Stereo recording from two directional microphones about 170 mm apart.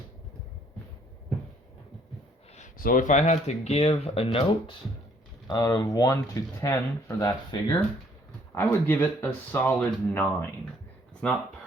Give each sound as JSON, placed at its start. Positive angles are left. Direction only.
{"t": 2.6, "sound": "speech", "side_deg": 55}
{"t": 8.5, "sound": "speech", "side_deg": 10}